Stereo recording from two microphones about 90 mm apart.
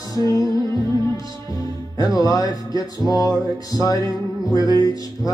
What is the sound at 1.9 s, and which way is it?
Speech, 40° left (ahead or behind).